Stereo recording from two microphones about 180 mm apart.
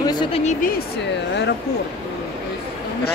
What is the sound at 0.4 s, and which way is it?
Speech, 45° left (ahead or behind).